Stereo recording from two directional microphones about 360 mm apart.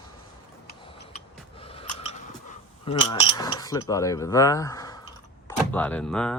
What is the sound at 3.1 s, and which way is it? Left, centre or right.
Speech, centre.